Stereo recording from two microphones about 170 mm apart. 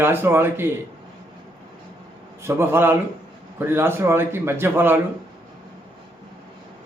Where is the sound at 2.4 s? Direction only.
15° right (ahead or behind).